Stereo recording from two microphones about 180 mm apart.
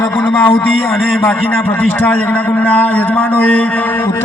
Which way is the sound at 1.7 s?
5° left (ahead or behind).